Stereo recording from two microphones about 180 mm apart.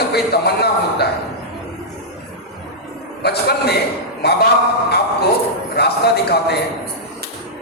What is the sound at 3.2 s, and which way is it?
Speech, 65° left (ahead or behind).